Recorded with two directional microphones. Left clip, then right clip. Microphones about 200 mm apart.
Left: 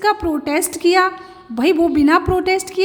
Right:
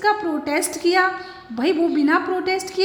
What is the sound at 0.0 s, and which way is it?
A woman's voice, 30° left (ahead or behind).